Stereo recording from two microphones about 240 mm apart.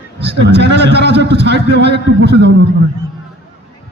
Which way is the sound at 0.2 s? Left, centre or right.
Right.